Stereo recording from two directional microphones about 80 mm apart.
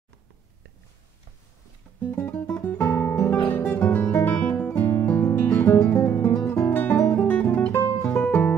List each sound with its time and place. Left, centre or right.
2.0 s music: left
5.0 s guitar: left
6.7 s guitar: centre
7.2 s music: centre
7.7 s music: left